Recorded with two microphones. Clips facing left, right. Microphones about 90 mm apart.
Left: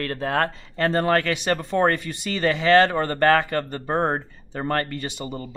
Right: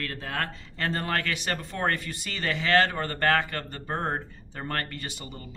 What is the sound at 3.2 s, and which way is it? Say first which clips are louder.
Speech: left 6 dB; 55° left (ahead or behind).